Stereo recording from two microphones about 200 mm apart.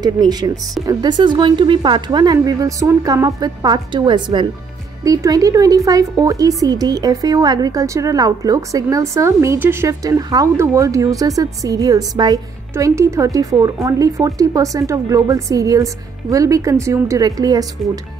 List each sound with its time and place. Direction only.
0.0 s speech: 20° right (ahead or behind)